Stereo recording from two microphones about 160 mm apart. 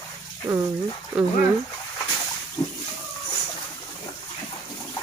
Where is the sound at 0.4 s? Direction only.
15° right (ahead or behind).